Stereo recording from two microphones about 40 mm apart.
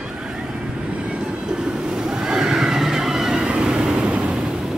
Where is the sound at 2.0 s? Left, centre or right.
Centre.